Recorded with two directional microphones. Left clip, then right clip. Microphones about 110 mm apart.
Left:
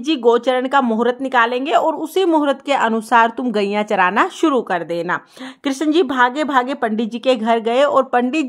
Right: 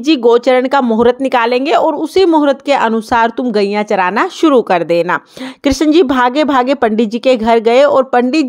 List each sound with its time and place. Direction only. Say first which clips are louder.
0.0 s speech: right 5 dB; 40° right (ahead or behind)
1.8 s a woman's voice: right 6 dB; 35° right (ahead or behind); by 5.2 s 60° right (ahead or behind)
5.7 s a woman's voice: right 7 dB; 40° right (ahead or behind)